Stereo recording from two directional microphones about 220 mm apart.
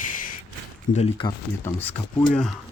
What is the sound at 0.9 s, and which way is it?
Speech, 25° left (ahead or behind).